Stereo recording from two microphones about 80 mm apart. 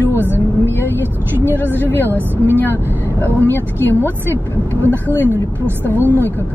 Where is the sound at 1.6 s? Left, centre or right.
Left.